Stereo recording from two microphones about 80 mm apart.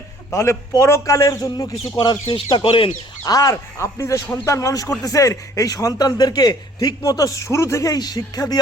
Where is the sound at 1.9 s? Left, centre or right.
Left.